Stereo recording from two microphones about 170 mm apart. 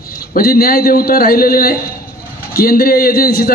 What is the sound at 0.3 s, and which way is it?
A man's voice, 60° left (ahead or behind).